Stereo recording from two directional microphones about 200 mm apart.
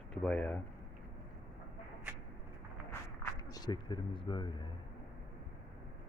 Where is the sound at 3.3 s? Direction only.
20° left (ahead or behind).